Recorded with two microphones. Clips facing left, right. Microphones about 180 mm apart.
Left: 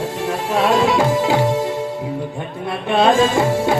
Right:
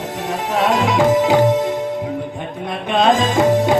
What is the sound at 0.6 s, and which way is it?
Music, 20° right (ahead or behind).